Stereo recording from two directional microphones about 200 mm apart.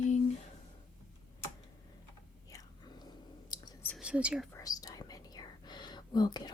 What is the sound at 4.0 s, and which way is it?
Speech, 5° right (ahead or behind).